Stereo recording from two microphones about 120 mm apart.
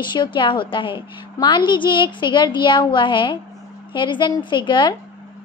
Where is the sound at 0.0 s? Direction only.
40° left (ahead or behind).